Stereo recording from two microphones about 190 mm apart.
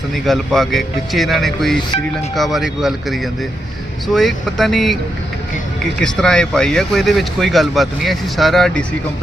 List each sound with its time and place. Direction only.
0.3 s speech: centre (ahead or behind)
6.0 s speech: 5° left (ahead or behind)